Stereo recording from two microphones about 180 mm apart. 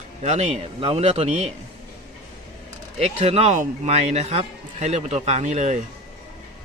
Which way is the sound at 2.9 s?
35° right (ahead or behind).